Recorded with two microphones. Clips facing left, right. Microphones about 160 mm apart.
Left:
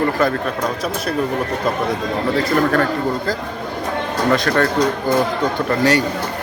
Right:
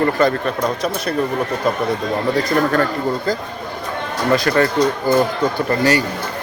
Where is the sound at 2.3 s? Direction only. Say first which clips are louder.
Left 1 dB; centre (ahead or behind).